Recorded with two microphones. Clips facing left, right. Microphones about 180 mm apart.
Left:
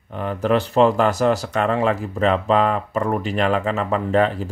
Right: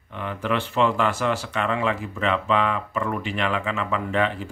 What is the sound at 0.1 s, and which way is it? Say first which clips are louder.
Speech: left 6 dB; 40° left (ahead or behind).